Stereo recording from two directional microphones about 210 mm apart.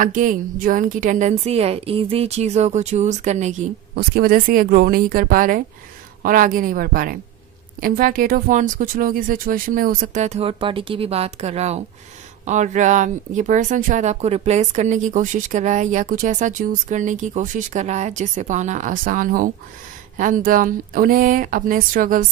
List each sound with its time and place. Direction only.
0.0 s speech: 40° right (ahead or behind)
3.9 s a woman's voice: 45° right (ahead or behind)